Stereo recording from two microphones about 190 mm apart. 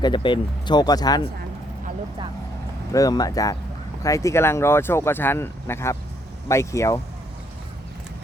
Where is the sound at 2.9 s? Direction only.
20° left (ahead or behind).